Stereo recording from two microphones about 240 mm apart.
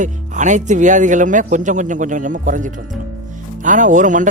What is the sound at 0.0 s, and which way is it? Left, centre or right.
Speech, right.